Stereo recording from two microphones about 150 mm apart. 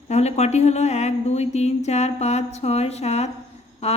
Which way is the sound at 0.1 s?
45° left (ahead or behind).